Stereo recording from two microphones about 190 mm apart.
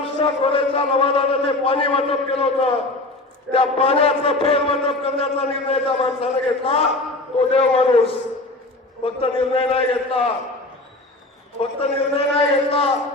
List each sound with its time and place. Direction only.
0.0 s a man's voice: 30° left (ahead or behind)
11.6 s a man's voice: 30° left (ahead or behind)